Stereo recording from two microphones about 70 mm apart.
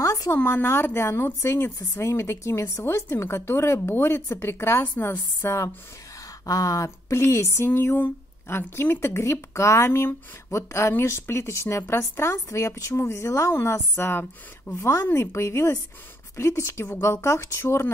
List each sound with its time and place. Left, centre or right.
0.0 s a sound: left
0.4 s speech: left
6.4 s speech: left
9.0 s speech: left